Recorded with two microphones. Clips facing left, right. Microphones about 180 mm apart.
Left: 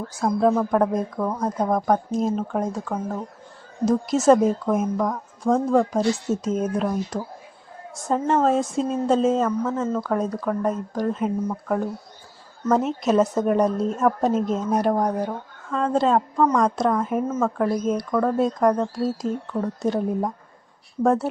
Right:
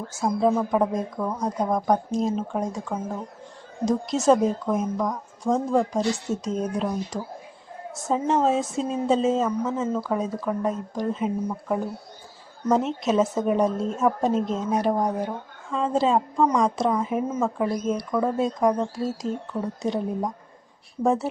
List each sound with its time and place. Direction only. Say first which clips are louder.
0.2 s speech: left 2 dB; 5° right (ahead or behind)
13.1 s speech: left 3 dB; centre (ahead or behind)